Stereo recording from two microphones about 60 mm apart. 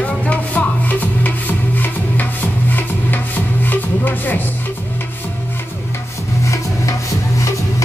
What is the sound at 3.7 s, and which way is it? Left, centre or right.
Music, left.